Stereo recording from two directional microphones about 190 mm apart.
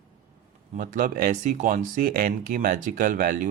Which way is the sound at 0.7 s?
45° right (ahead or behind).